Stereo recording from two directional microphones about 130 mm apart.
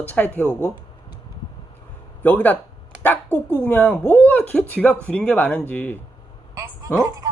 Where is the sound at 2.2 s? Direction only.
15° left (ahead or behind).